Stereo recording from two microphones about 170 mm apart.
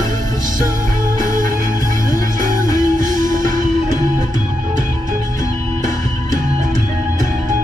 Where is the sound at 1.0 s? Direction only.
50° right (ahead or behind).